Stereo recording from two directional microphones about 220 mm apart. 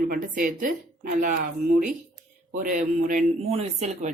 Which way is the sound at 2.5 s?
35° right (ahead or behind).